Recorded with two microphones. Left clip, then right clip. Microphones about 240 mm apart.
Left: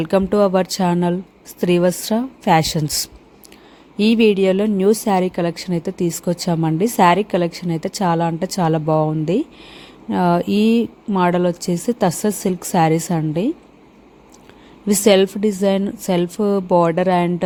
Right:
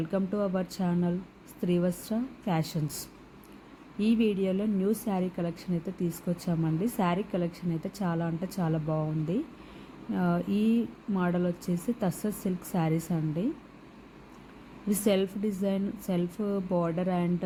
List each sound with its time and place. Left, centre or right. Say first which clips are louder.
0.0 s a woman's voice: left 15 dB; left
14.8 s a woman's voice: left 14 dB; left